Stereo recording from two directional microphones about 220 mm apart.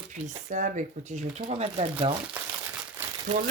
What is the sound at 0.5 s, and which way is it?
Speech, 35° right (ahead or behind).